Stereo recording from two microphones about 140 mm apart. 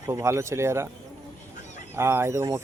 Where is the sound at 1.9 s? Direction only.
15° right (ahead or behind).